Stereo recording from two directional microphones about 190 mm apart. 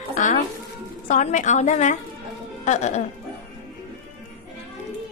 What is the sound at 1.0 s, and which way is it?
A woman's voice, 40° left (ahead or behind).